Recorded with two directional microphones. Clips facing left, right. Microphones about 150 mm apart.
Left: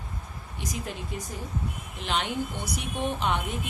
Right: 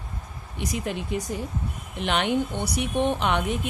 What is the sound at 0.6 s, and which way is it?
Speech, 70° right (ahead or behind).